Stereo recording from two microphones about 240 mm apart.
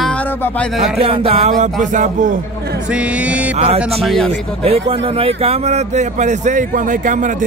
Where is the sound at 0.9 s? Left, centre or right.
Right.